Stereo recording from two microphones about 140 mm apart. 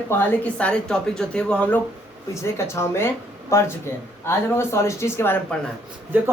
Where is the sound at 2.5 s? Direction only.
20° left (ahead or behind).